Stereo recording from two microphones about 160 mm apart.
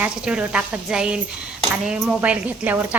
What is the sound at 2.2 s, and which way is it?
Speech, 10° right (ahead or behind).